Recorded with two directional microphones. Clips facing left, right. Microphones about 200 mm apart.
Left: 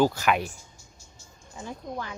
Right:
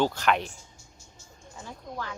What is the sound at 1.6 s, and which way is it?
Speech, 20° left (ahead or behind).